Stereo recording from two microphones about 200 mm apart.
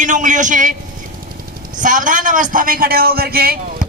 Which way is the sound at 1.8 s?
40° right (ahead or behind).